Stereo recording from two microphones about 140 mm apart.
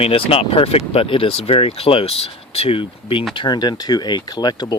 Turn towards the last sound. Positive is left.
turn(degrees=30)  # may be behind; listen again after turning